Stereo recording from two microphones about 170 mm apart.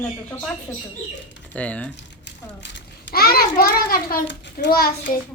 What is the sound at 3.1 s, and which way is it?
A child's voice, 60° left (ahead or behind).